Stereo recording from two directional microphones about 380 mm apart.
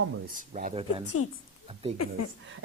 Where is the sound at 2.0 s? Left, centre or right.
Left.